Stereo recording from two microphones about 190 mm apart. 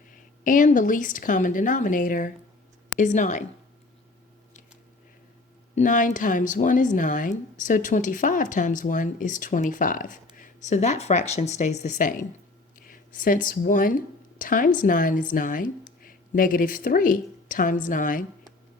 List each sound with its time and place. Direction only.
0.1 s a woman's voice: 45° left (ahead or behind)
5.7 s speech: 40° left (ahead or behind)